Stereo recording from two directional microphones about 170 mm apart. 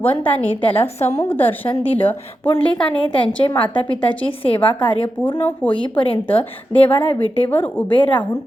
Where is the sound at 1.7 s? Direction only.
35° left (ahead or behind).